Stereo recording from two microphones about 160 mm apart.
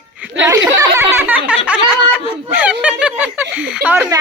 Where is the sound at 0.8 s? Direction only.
15° right (ahead or behind).